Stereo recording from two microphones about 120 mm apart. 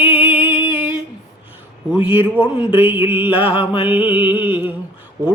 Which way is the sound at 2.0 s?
15° right (ahead or behind).